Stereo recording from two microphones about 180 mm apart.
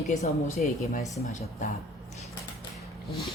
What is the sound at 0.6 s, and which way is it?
Speech, 45° left (ahead or behind).